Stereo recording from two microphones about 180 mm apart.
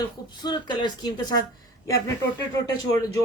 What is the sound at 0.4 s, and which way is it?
Speech, 25° left (ahead or behind).